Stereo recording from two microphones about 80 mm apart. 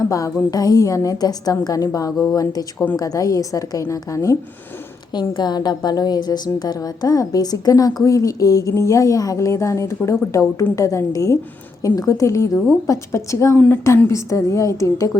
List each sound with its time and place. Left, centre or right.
0.0 s a woman's voice: left
5.1 s a woman's voice: left